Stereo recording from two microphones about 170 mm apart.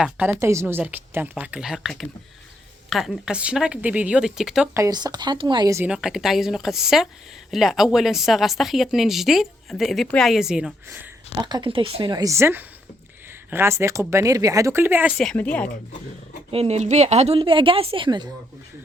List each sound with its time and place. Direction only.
0.0 s speech: 10° right (ahead or behind)
4.7 s speech: 20° right (ahead or behind)
5.8 s speech: 5° right (ahead or behind)
11.3 s speech: 25° right (ahead or behind)
15.2 s a woman's voice: 5° left (ahead or behind)
16.5 s a woman's voice: 35° right (ahead or behind)